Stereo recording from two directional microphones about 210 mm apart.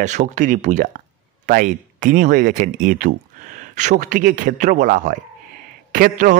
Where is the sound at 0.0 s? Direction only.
35° right (ahead or behind).